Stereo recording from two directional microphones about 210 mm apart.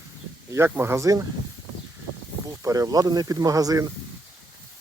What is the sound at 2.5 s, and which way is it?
Speech, 15° right (ahead or behind).